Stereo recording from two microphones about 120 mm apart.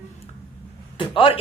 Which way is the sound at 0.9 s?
45° left (ahead or behind).